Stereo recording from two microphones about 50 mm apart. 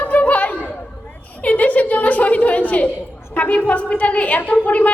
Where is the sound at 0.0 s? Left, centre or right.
Left.